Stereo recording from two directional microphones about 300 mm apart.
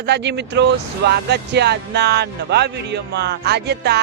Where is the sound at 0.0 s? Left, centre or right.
Right.